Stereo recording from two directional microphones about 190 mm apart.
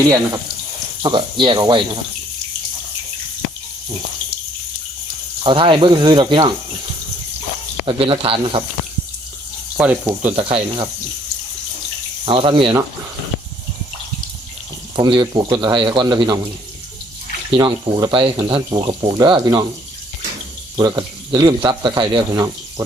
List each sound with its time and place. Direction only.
1.0 s speech: 25° right (ahead or behind)
5.4 s speech: 25° right (ahead or behind)
7.9 s speech: 25° right (ahead or behind)
9.7 s speech: 10° right (ahead or behind)
10.3 s speech: 30° right (ahead or behind)
12.2 s speech: 30° right (ahead or behind)
14.9 s speech: 25° right (ahead or behind)
17.5 s speech: 25° right (ahead or behind)
20.7 s speech: 20° right (ahead or behind)